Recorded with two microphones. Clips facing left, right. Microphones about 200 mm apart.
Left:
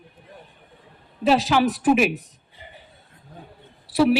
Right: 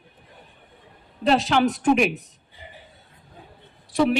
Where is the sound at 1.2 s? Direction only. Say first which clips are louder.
Left 1 dB; 5° left (ahead or behind).